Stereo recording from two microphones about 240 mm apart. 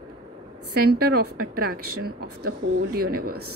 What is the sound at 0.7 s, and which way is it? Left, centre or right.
Speech, right.